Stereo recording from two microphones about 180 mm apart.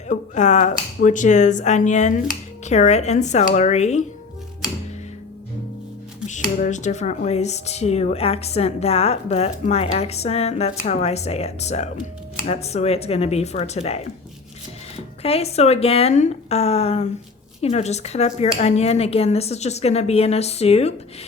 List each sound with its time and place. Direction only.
0.1 s speech: 40° left (ahead or behind)
6.2 s speech: 45° left (ahead or behind)